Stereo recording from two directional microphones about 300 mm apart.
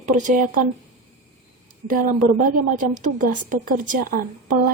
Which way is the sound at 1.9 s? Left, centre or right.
Right.